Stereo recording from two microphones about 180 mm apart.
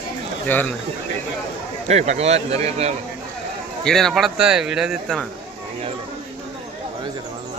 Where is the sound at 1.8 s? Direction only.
40° right (ahead or behind).